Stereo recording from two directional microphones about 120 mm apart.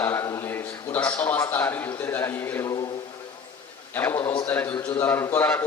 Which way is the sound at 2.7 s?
35° left (ahead or behind).